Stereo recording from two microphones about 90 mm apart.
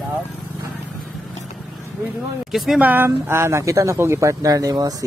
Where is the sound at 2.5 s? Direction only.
Centre (ahead or behind).